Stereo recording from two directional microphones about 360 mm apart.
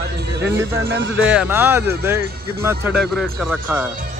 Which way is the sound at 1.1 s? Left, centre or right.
Centre.